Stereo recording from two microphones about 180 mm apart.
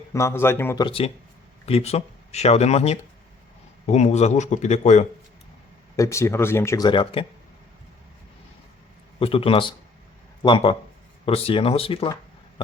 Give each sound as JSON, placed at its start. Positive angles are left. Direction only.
{"t": 0.1, "sound": "speech", "side_deg": 15}
{"t": 0.9, "sound": "speech", "side_deg": 30}
{"t": 6.0, "sound": "speech", "side_deg": 15}
{"t": 9.1, "sound": "speech", "side_deg": 30}